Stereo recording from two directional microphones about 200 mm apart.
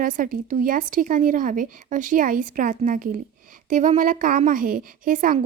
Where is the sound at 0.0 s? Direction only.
40° right (ahead or behind).